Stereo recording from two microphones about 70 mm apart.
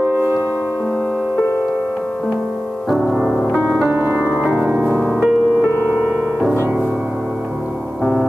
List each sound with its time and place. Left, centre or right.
0.1 s music: right
2.9 s music: centre
3.9 s music: right
4.6 s music: centre
8.0 s music: centre